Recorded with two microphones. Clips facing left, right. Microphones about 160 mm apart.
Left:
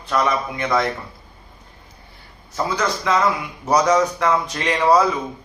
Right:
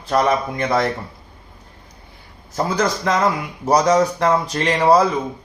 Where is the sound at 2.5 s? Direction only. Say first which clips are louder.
Right 2 dB; 40° right (ahead or behind).